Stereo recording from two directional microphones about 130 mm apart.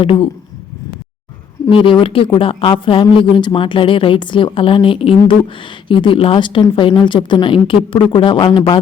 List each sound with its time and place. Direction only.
0.0 s speech: 45° left (ahead or behind)
1.7 s speech: 40° left (ahead or behind)